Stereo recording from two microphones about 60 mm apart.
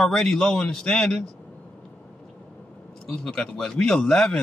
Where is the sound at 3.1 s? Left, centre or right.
Centre.